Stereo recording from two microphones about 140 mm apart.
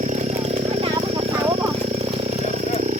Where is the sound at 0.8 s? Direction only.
40° right (ahead or behind).